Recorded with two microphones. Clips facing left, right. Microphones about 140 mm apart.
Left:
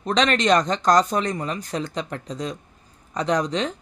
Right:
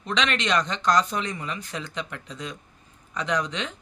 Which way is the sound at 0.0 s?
40° left (ahead or behind).